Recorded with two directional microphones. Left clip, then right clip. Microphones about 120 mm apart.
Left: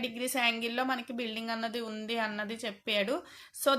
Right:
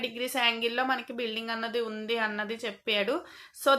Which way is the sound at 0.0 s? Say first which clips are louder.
Right 3 dB; 30° left (ahead or behind).